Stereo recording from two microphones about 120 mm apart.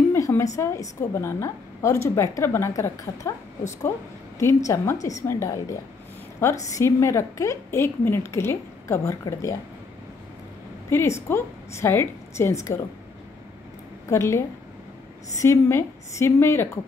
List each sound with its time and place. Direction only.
0.1 s a woman's voice: 25° left (ahead or behind)
10.9 s a woman's voice: 20° left (ahead or behind)
14.0 s a woman's voice: 25° left (ahead or behind)